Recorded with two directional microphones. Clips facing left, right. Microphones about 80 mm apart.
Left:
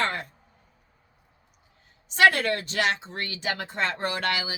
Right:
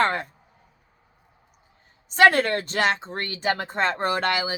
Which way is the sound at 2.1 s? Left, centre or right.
Right.